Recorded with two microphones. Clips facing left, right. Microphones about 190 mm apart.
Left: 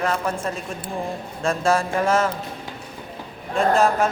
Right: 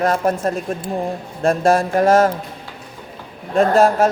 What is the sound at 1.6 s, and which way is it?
Speech, 40° right (ahead or behind).